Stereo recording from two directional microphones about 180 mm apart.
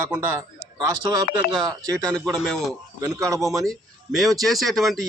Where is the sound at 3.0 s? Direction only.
15° right (ahead or behind).